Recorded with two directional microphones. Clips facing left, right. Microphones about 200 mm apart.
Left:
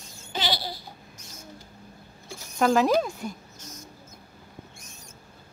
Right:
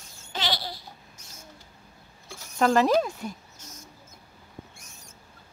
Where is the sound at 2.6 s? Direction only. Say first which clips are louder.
Even; centre (ahead or behind).